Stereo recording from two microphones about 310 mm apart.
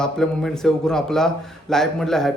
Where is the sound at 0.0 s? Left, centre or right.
Centre.